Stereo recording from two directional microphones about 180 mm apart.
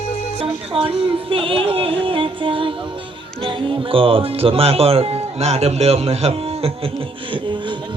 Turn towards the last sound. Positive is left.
turn(degrees=-35)  # may be behind; listen again after turning